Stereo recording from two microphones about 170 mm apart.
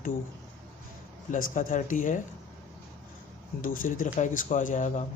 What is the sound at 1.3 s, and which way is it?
Speech, 50° left (ahead or behind).